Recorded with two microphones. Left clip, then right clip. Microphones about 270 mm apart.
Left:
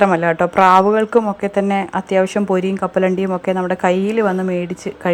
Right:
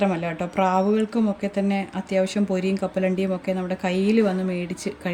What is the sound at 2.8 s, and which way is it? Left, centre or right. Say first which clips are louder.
Speech: left 7 dB; left.